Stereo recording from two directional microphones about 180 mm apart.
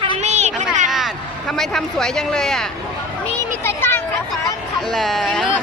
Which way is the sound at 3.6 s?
15° left (ahead or behind).